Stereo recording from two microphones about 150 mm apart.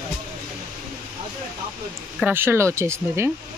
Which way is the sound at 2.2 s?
15° right (ahead or behind).